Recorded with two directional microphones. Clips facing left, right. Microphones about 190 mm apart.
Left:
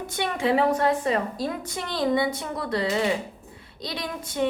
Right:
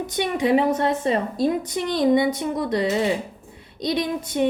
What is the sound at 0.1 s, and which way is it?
Female singing, 20° right (ahead or behind).